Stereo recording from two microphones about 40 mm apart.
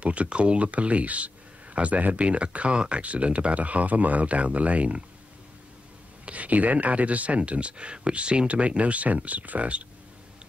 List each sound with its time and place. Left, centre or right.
0.0 s speech: right
6.2 s speech: right